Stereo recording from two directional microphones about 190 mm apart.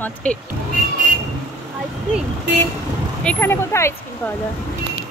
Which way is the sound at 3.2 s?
10° left (ahead or behind).